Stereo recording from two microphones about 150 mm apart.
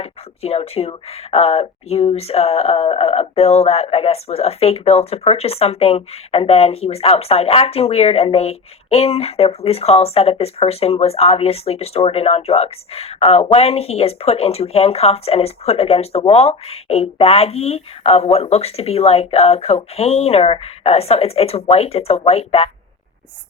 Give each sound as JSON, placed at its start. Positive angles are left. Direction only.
{"t": 0.0, "sound": "speech", "side_deg": 45}